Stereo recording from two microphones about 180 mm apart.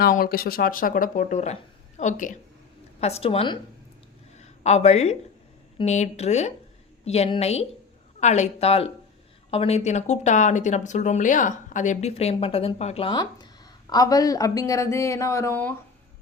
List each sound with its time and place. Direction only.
0.0 s speech: 55° left (ahead or behind); by 3.6 s 30° left (ahead or behind)
4.4 s a sound: 40° left (ahead or behind)
5.7 s a woman's voice: 40° left (ahead or behind); by 15.7 s 15° left (ahead or behind)